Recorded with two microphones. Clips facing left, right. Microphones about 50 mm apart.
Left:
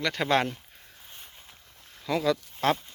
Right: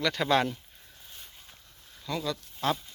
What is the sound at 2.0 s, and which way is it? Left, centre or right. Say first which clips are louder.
Speech: left 7 dB; left.